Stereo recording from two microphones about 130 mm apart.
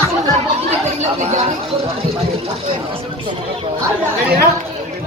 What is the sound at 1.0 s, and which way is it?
Speech, 55° right (ahead or behind).